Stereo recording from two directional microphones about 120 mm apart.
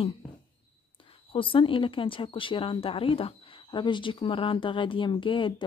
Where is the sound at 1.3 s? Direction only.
45° left (ahead or behind).